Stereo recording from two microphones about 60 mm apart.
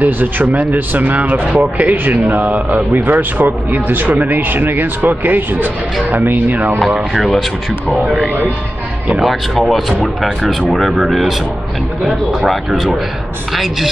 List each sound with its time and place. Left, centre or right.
0.0 s speech: right
9.2 s speech: centre
10.4 s speech: centre
10.8 s speech: centre